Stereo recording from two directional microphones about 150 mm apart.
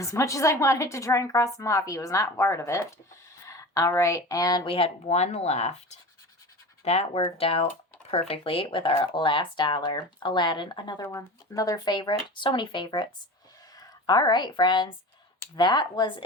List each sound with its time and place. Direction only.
0.0 s a woman's voice: 20° left (ahead or behind); by 5.7 s 45° left (ahead or behind)
6.8 s speech: 45° left (ahead or behind)
11.0 s a woman's voice: 20° left (ahead or behind)